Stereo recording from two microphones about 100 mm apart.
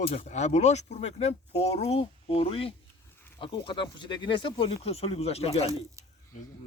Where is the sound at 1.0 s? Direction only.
90° left; by 2.7 s 70° left (ahead or behind).